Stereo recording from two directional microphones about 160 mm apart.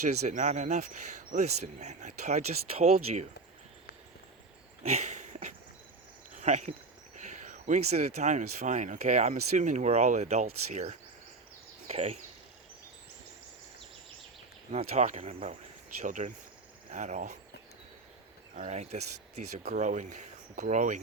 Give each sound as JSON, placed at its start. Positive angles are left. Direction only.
{"t": 0.3, "sound": "speech", "side_deg": -50}
{"t": 4.8, "sound": "a sound", "side_deg": -45}
{"t": 6.3, "sound": "speech", "side_deg": -50}
{"t": 14.7, "sound": "speech", "side_deg": -45}
{"t": 18.5, "sound": "speech", "side_deg": -45}